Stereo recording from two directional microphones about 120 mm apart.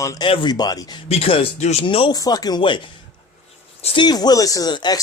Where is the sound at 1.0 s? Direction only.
55° left (ahead or behind).